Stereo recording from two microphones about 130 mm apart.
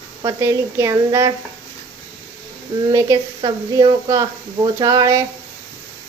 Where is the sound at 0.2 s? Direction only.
25° right (ahead or behind).